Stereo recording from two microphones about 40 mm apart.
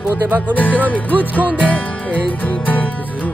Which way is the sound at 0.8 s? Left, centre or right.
Left.